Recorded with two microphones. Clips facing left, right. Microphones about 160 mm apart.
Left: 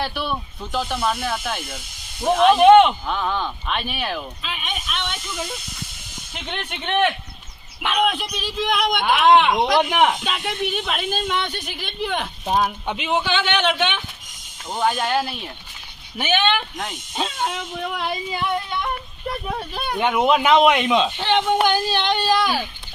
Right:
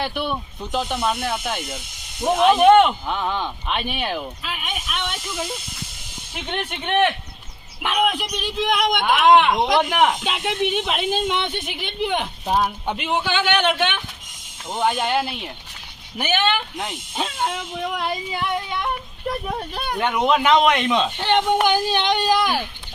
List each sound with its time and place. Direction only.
0.0 s speech: 15° right (ahead or behind)
3.1 s speech: 15° right (ahead or behind)
3.9 s a sound: 15° right (ahead or behind)
6.3 s speech: 10° right (ahead or behind)
7.8 s a sound: 5° right (ahead or behind)
8.6 s speech: centre (ahead or behind)
10.8 s a woman's voice: 20° right (ahead or behind)
12.5 s speech: 5° right (ahead or behind)
14.7 s speech: 15° right (ahead or behind)
19.5 s speech: centre (ahead or behind)
21.2 s speech: 10° right (ahead or behind)